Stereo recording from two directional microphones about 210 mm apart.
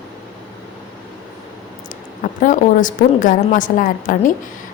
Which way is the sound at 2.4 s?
40° left (ahead or behind).